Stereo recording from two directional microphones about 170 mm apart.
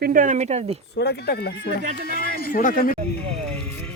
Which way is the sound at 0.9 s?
75° left (ahead or behind).